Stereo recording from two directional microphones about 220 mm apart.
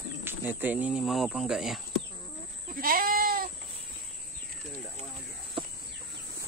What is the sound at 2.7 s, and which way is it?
Goat, 40° right (ahead or behind).